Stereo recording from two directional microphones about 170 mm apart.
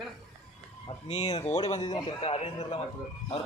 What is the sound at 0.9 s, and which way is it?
A man's voice, 35° left (ahead or behind).